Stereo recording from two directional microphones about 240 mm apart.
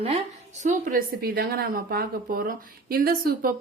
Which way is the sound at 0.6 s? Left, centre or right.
Right.